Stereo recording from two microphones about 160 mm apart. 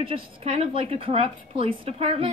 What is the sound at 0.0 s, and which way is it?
A woman's voice, 35° right (ahead or behind).